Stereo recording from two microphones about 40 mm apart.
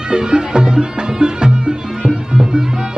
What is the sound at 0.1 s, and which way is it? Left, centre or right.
Music, centre.